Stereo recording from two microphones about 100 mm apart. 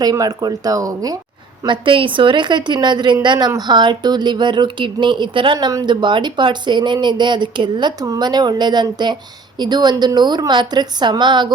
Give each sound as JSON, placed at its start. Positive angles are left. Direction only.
{"t": 0.0, "sound": "speech", "side_deg": -40}
{"t": 1.6, "sound": "speech", "side_deg": -55}
{"t": 8.0, "sound": "speech", "side_deg": -40}